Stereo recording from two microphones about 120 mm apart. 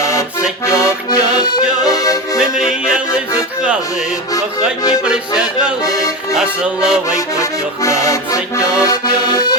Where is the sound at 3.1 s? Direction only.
30° left (ahead or behind).